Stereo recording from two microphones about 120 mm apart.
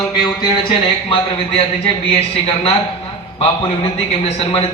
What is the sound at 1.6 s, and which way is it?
A man's voice, 55° left (ahead or behind).